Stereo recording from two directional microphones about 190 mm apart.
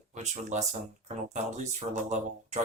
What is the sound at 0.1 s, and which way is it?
Speech, 40° right (ahead or behind).